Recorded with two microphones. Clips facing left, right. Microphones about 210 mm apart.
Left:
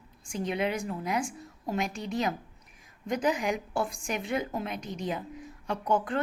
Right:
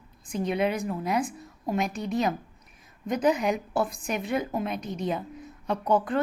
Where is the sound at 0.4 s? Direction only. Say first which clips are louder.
Right 3 dB; 20° left (ahead or behind).